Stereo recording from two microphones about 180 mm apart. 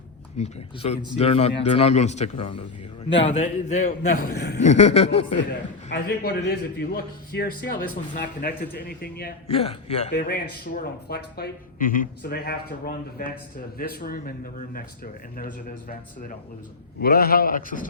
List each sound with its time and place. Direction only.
0.3 s speech: 35° left (ahead or behind)
3.8 s a man's voice: 55° left (ahead or behind)
4.6 s speech: 40° left (ahead or behind)
5.9 s a man's voice: 70° left (ahead or behind)
9.5 s speech: 35° left (ahead or behind)
10.1 s a man's voice: 65° left (ahead or behind)
17.0 s a man's voice: 55° left (ahead or behind)